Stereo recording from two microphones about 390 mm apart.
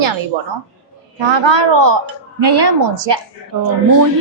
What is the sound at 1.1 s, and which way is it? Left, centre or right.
A woman's voice, right.